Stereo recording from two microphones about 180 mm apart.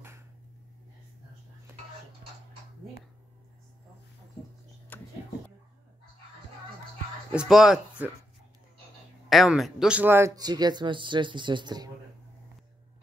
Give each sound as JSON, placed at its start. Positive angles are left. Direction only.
{"t": 4.9, "sound": "a sound", "side_deg": 10}
{"t": 7.3, "sound": "speech", "side_deg": -5}
{"t": 9.3, "sound": "speech", "side_deg": 0}